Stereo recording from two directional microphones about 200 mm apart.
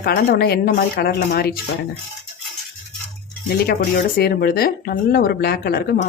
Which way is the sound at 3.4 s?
50° left (ahead or behind).